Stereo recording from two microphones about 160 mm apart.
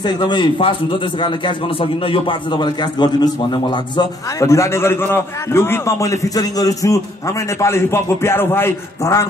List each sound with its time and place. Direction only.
0.0 s a man's voice: 30° left (ahead or behind)